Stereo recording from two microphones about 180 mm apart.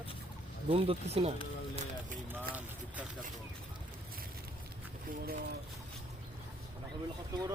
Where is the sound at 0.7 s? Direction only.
30° right (ahead or behind).